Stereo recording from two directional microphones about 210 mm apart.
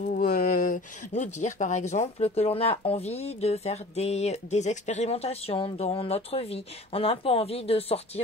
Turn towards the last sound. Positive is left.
turn(degrees=30)  # may be behind; listen again after turning